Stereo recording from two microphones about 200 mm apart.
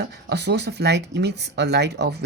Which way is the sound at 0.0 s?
55° right (ahead or behind).